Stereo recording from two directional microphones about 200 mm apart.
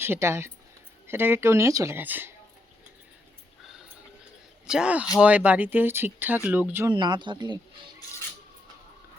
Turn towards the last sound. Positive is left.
turn(degrees=-20)  # may be behind; listen again after turning